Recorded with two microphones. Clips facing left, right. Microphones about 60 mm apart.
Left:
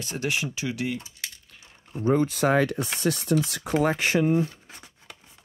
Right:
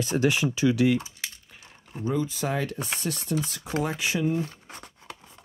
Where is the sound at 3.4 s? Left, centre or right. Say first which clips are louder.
Left 4 dB; left.